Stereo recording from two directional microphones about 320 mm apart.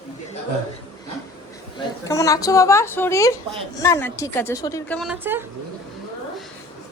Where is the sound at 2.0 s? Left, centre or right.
Centre.